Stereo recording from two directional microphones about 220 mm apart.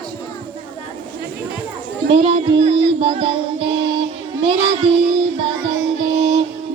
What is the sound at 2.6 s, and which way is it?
Music, 25° right (ahead or behind).